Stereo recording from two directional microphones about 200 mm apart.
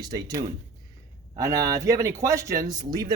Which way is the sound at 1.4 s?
15° right (ahead or behind).